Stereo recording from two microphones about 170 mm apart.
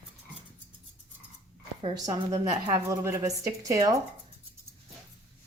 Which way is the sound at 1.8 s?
20° right (ahead or behind).